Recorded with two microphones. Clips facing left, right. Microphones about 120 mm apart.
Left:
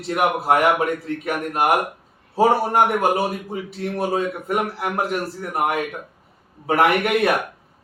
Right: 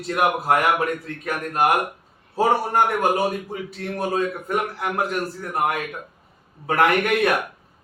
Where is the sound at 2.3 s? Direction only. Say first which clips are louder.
Left 3 dB; 15° left (ahead or behind).